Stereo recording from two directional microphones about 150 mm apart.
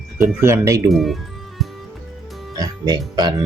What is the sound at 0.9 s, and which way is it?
Music, centre (ahead or behind).